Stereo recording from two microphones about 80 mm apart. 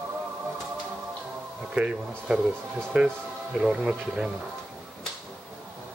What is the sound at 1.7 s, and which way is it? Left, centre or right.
Speech, centre.